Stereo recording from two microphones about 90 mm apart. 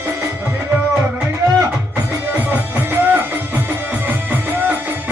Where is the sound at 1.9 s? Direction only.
20° right (ahead or behind).